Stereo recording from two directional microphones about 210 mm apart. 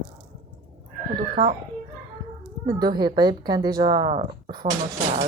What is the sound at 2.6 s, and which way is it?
Speech, 20° right (ahead or behind).